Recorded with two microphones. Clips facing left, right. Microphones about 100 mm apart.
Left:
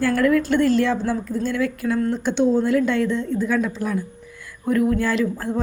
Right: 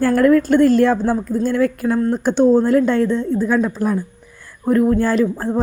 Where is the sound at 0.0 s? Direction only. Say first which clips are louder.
Right 5 dB; 40° right (ahead or behind).